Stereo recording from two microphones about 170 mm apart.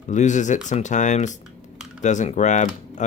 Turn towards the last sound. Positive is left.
turn(degrees=45)  # may be behind; listen again after turning